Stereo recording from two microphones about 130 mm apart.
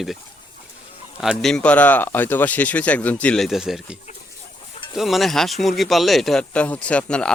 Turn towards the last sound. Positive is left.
turn(degrees=10)  # may be behind; listen again after turning